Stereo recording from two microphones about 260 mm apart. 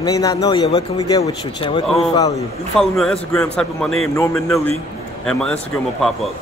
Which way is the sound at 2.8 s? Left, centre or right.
Centre.